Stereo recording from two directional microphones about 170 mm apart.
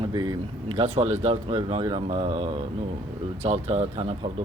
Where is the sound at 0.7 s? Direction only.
35° right (ahead or behind).